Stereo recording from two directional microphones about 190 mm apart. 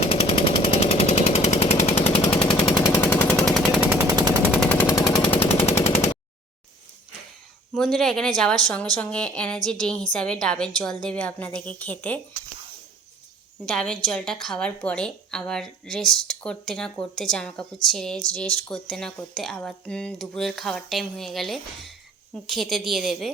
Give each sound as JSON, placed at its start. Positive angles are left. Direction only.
{"t": 0.0, "sound": "jackhammer", "side_deg": 30}
{"t": 3.0, "sound": "machine gun", "side_deg": 10}
{"t": 4.6, "sound": "machine gun", "side_deg": 10}
{"t": 5.3, "sound": "machine gun", "side_deg": 30}
{"t": 7.7, "sound": "speech", "side_deg": 0}
{"t": 13.7, "sound": "speech", "side_deg": 5}